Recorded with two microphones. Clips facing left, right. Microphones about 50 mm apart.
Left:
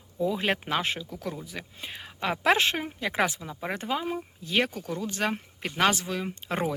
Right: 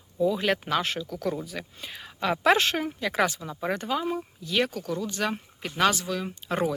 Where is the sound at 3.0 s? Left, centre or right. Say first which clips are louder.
Right 1 dB; left.